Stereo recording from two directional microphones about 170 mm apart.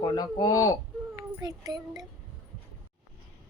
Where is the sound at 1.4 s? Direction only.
25° right (ahead or behind).